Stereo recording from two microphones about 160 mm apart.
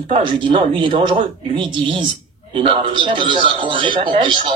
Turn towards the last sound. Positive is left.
turn(degrees=-30)  # may be behind; listen again after turning